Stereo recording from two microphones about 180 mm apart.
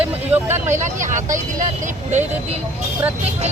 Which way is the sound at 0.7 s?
45° right (ahead or behind).